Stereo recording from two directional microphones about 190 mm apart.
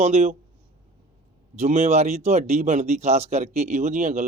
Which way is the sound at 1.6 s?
35° right (ahead or behind).